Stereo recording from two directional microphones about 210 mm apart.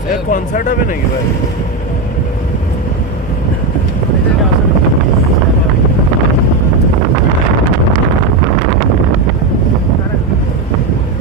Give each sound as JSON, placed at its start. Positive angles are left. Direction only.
{"t": 0.3, "sound": "speech", "side_deg": 40}